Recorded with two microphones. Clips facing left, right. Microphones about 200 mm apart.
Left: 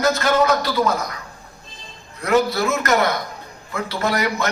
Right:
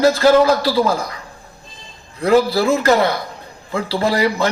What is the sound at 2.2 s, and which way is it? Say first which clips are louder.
A man's voice: right 4 dB; 30° right (ahead or behind).